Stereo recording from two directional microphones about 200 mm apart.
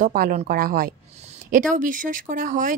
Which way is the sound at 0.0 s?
45° right (ahead or behind).